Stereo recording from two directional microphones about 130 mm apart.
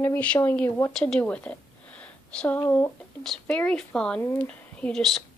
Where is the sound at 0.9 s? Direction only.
5° left (ahead or behind).